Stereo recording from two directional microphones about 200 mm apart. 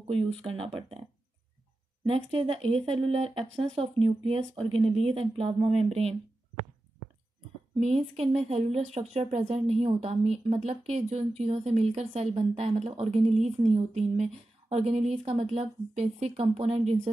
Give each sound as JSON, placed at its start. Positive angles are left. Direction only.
{"t": 0.0, "sound": "speech", "side_deg": -25}
{"t": 2.0, "sound": "speech", "side_deg": -25}
{"t": 7.8, "sound": "speech", "side_deg": -30}